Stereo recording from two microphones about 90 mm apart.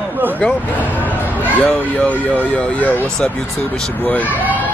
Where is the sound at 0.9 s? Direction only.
20° left (ahead or behind).